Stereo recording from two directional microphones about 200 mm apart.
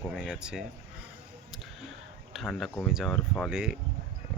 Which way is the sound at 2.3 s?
Centre (ahead or behind).